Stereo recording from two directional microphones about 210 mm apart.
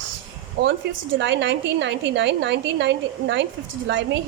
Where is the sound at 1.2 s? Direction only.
60° right (ahead or behind).